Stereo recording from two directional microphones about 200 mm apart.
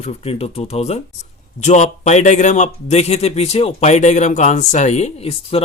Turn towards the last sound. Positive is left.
turn(degrees=30)  # may be behind; listen again after turning